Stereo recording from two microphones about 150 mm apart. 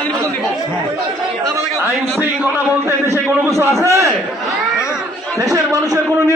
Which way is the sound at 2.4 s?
15° right (ahead or behind).